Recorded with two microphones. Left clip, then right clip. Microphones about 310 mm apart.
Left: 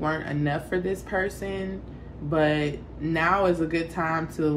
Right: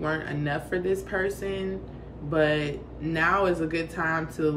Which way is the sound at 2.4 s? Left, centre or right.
Centre.